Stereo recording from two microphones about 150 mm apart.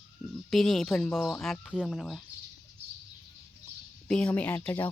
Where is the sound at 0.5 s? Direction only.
Centre (ahead or behind).